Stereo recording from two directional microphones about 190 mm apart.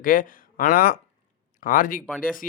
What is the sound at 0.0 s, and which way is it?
Speech, 45° left (ahead or behind).